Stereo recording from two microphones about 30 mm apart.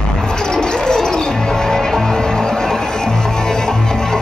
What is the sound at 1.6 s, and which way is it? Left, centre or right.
Music, centre.